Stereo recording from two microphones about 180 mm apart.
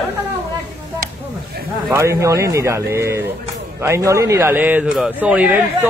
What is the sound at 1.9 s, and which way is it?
Speech, 15° right (ahead or behind).